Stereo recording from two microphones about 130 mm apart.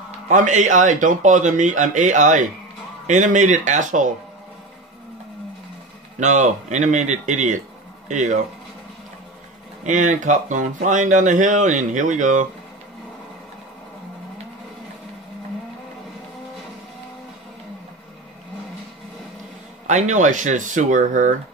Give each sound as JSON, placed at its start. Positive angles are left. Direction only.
{"t": 0.3, "sound": "speech", "side_deg": -75}
{"t": 6.1, "sound": "speech", "side_deg": -70}
{"t": 9.8, "sound": "speech", "side_deg": -70}
{"t": 19.9, "sound": "speech", "side_deg": -65}